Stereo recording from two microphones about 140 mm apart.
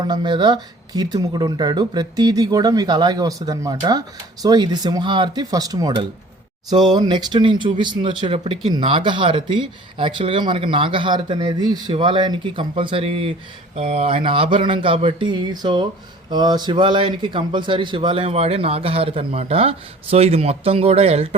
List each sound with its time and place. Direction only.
0.0 s speech: 30° right (ahead or behind); by 21.2 s 45° right (ahead or behind)